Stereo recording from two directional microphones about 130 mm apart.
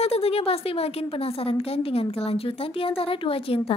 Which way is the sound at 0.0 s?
50° left (ahead or behind).